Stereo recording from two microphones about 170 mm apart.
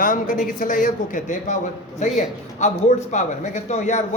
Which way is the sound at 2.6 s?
45° left (ahead or behind).